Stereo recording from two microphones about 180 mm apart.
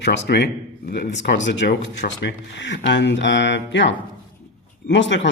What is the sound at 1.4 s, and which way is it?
A man's voice, 75° left (ahead or behind).